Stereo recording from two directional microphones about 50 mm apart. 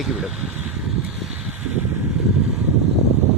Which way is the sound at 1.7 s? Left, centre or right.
Right.